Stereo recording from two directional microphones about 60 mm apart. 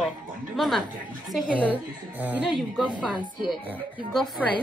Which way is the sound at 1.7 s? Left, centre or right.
Right.